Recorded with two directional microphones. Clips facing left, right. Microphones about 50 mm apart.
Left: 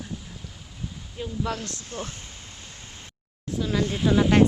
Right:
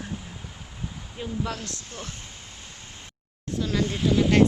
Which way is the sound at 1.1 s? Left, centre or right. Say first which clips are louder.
Left 1 dB; centre.